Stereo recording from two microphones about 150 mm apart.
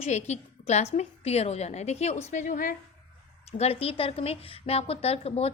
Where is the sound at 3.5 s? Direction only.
45° left (ahead or behind).